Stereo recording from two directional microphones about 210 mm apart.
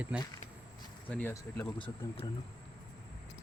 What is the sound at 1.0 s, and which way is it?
Speech, 10° left (ahead or behind).